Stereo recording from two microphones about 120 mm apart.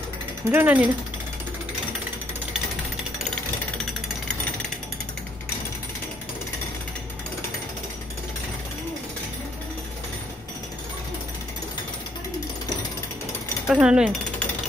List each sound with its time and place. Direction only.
0.5 s speech: 15° right (ahead or behind)
13.7 s speech: 5° right (ahead or behind)